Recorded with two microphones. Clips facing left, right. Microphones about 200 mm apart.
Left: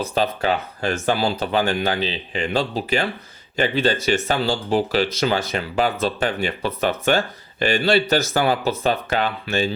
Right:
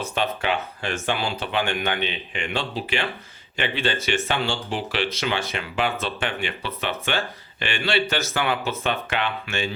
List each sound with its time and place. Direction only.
0.0 s speech: 35° left (ahead or behind)